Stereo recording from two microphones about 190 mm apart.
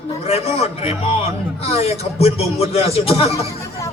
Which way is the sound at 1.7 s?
30° left (ahead or behind).